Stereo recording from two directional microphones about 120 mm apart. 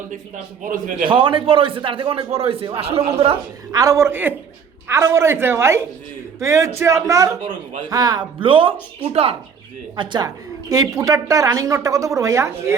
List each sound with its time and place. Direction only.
0.6 s a man's voice: 90° right
1.0 s a man's voice: 45° right (ahead or behind)
3.7 s a woman's voice: 30° right (ahead or behind)
8.4 s a man's voice: 45° right (ahead or behind)
9.9 s a woman's voice: 40° right (ahead or behind)